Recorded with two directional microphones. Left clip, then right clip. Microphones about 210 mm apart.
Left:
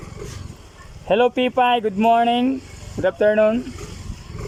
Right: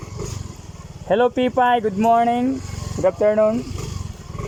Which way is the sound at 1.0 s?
5° left (ahead or behind).